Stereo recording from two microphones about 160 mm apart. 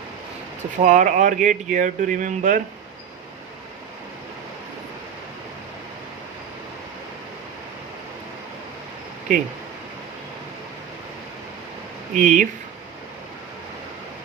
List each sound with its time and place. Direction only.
0.8 s speech: 50° right (ahead or behind)
9.3 s speech: 55° right (ahead or behind)
12.1 s speech: 55° right (ahead or behind)